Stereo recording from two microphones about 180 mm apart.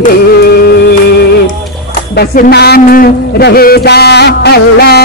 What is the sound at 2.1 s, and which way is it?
A man's voice, 65° left (ahead or behind).